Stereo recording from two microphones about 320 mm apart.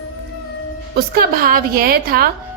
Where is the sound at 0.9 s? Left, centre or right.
Right.